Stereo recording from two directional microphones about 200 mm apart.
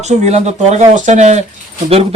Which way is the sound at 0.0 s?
35° right (ahead or behind).